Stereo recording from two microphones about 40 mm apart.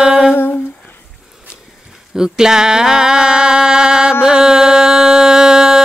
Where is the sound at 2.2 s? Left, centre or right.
Centre.